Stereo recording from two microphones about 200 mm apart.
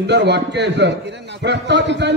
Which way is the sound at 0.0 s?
60° right (ahead or behind).